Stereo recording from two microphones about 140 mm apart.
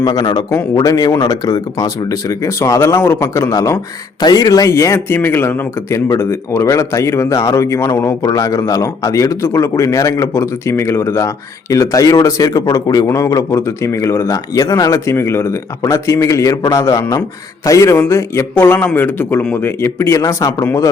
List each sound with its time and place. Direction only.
0.0 s a man's voice: 25° left (ahead or behind)